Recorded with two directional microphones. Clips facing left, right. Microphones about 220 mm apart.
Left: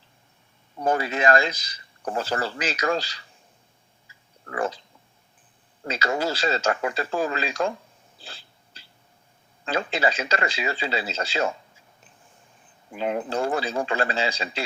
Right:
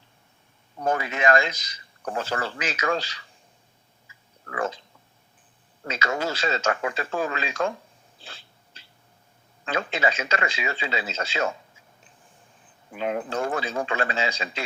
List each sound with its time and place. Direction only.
0.9 s speech: 35° left (ahead or behind)
4.4 s a sound: 35° left (ahead or behind)
5.8 s speech: 35° left (ahead or behind)
8.2 s owl: 35° left (ahead or behind)
9.6 s speech: 35° left (ahead or behind)
13.0 s speech: 30° left (ahead or behind)